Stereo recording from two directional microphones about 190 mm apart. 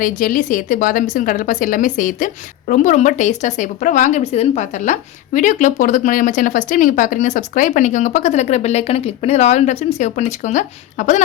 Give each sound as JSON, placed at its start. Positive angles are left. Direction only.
{"t": 0.0, "sound": "a woman's voice", "side_deg": 45}